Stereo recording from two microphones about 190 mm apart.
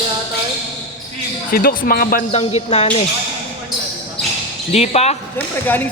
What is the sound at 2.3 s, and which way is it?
Speech, 30° left (ahead or behind).